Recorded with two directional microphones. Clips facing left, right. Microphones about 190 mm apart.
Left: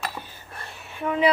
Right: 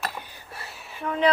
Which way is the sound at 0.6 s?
Centre (ahead or behind).